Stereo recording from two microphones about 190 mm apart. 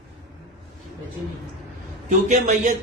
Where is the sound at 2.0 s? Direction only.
40° right (ahead or behind).